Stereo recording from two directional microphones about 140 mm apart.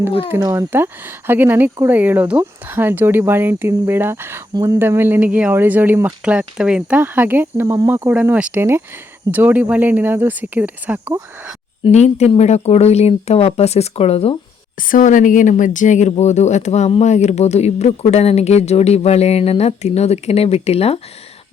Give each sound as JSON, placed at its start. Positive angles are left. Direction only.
{"t": 0.3, "sound": "speech", "side_deg": -15}
{"t": 12.0, "sound": "speech", "side_deg": 50}
{"t": 14.8, "sound": "speech", "side_deg": 75}